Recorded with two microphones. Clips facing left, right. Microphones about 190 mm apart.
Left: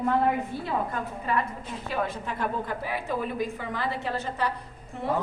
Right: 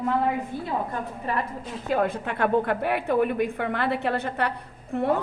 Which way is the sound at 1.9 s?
60° right (ahead or behind).